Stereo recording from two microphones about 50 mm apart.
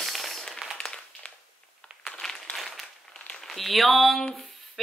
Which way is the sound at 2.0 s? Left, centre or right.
Centre.